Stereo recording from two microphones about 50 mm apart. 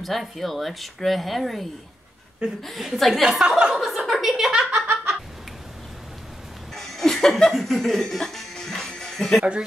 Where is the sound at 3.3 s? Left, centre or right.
Centre.